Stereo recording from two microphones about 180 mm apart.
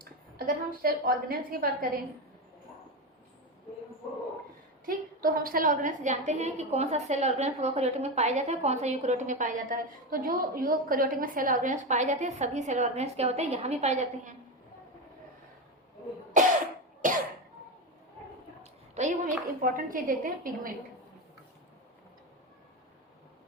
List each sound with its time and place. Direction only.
0.3 s a woman's voice: 55° right (ahead or behind)
4.9 s a woman's voice: 55° right (ahead or behind)
17.0 s cough: 45° right (ahead or behind)
18.6 s a woman's voice: 40° right (ahead or behind)